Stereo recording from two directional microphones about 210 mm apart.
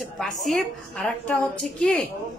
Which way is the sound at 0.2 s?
Centre (ahead or behind).